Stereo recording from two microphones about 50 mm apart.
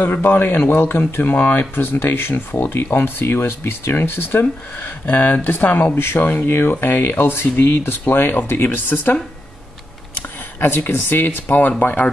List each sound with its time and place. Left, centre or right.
0.0 s speech: left
5.9 s speech: left